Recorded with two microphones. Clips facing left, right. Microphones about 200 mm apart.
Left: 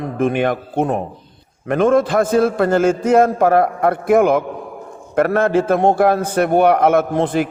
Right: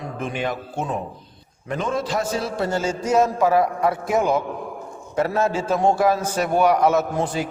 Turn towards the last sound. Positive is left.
turn(degrees=55)  # may be behind; listen again after turning